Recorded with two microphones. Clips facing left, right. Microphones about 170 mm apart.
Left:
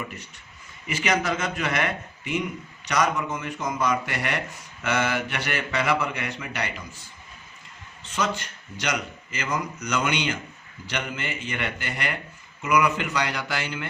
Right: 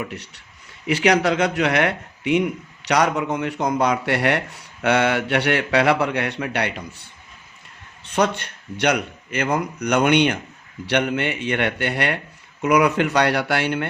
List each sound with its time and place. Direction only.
0.0 s a man's voice: 70° right (ahead or behind)